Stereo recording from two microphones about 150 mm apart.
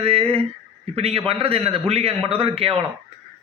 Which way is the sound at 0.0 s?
40° right (ahead or behind).